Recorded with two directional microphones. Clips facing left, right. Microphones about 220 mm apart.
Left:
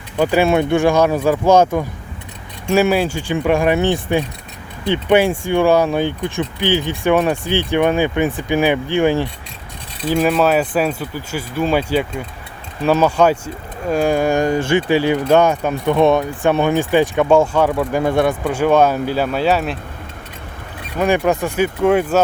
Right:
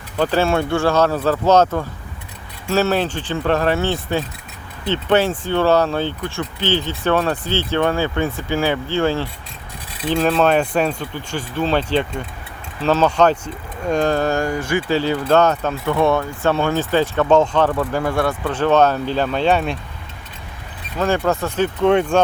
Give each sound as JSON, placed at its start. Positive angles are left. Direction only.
{"t": 0.2, "sound": "speech", "side_deg": 10}
{"t": 14.8, "sound": "speech", "side_deg": 15}
{"t": 18.0, "sound": "speech", "side_deg": 20}
{"t": 21.0, "sound": "speech", "side_deg": 15}